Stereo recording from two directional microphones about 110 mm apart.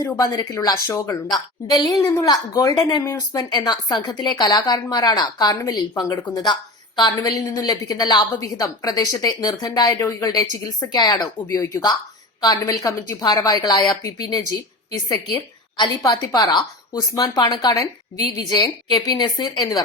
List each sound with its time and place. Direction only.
0.0 s a woman's voice: 35° left (ahead or behind)
15.8 s a woman's voice: 40° left (ahead or behind)